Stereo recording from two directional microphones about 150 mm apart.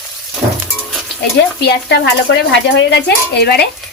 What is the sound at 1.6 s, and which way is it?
Speech, 90° left.